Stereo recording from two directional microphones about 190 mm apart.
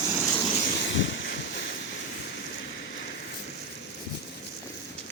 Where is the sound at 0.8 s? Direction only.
70° left (ahead or behind).